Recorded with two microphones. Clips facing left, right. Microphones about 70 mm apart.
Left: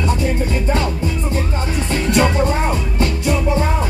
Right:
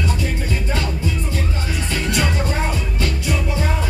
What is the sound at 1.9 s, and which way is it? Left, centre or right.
Music, left.